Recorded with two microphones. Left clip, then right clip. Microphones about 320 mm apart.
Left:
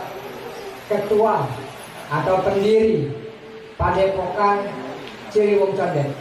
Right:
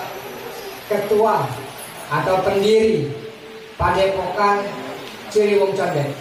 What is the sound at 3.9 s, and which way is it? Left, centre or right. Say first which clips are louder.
Speech: even; centre.